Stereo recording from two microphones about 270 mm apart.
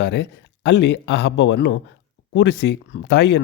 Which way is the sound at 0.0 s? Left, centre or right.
Left.